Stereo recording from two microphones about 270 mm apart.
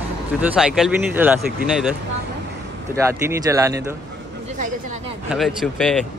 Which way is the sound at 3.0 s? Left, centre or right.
Centre.